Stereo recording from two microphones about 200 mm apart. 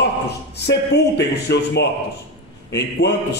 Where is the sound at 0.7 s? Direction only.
55° left (ahead or behind).